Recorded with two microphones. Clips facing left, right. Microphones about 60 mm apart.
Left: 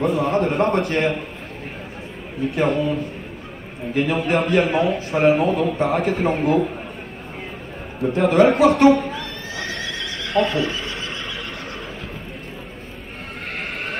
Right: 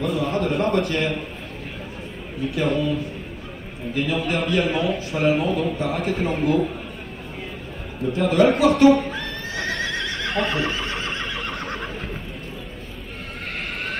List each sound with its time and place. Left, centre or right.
0.0 s a man's voice: left
2.4 s a man's voice: left
8.0 s a man's voice: left
9.5 s neigh: right